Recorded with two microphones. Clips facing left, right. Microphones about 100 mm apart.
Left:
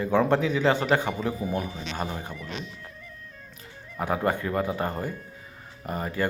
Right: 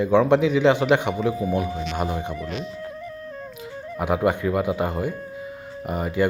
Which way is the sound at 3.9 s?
15° right (ahead or behind).